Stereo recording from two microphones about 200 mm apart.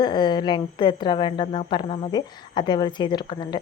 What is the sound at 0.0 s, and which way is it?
Speech, 20° left (ahead or behind).